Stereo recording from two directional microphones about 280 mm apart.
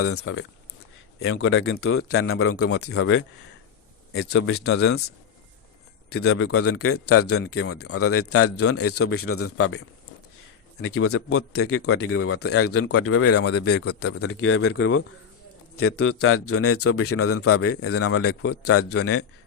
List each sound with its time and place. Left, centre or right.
0.0 s a man's voice: left
13.4 s speech: left
13.7 s a man's voice: left